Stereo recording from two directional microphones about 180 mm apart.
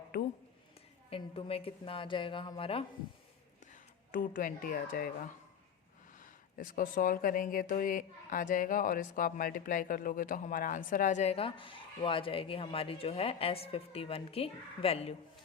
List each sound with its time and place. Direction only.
0.1 s a sound: 60° left (ahead or behind)
1.1 s a woman's voice: 30° left (ahead or behind)
3.7 s speech: 50° left (ahead or behind)
6.1 s speech: 50° left (ahead or behind)